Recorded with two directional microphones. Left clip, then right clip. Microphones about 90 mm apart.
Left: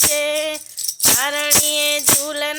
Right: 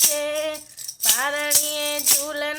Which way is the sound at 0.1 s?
20° left (ahead or behind).